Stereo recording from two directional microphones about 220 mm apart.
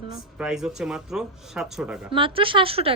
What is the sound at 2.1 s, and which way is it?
Speech, 25° right (ahead or behind).